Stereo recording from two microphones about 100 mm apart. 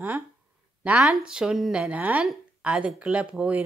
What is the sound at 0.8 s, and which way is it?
A woman's voice, 5° right (ahead or behind).